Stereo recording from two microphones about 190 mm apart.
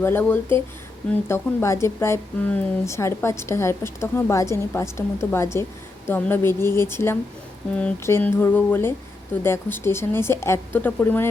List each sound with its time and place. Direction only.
0.0 s speech: 10° left (ahead or behind)